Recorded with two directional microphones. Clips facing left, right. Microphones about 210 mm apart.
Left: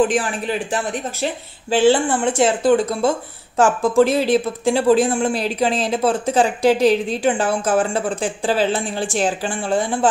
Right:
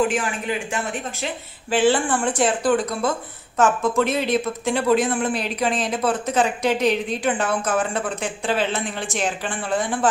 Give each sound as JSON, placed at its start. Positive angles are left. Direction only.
{"t": 0.1, "sound": "speech", "side_deg": 35}